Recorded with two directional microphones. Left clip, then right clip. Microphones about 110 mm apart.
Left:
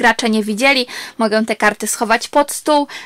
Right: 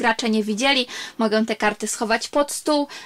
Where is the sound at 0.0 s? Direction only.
40° left (ahead or behind).